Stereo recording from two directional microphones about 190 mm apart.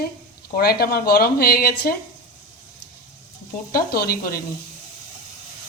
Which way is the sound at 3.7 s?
50° left (ahead or behind).